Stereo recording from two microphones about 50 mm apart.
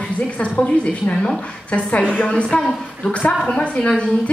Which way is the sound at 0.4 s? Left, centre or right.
Left.